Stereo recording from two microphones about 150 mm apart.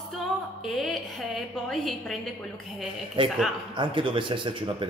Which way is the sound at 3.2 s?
35° right (ahead or behind).